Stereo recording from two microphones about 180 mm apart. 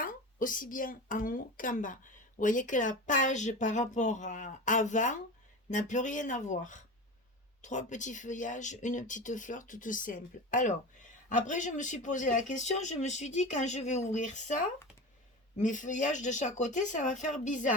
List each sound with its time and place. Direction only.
0.0 s a woman's voice: 50° left (ahead or behind)